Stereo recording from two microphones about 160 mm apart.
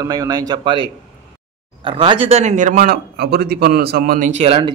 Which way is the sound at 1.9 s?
30° right (ahead or behind).